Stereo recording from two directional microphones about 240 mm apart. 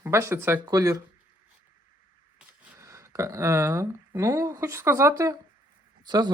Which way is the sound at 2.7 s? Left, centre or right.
Centre.